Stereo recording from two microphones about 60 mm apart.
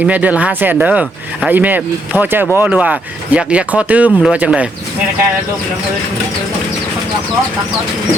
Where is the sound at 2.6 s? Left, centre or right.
Right.